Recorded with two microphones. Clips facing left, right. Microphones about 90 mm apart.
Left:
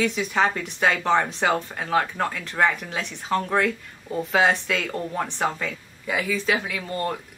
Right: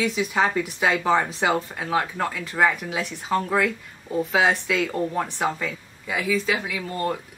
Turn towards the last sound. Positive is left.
turn(degrees=0)  # may be behind; listen again after turning